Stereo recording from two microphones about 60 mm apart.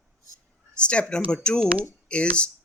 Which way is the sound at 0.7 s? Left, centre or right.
Centre.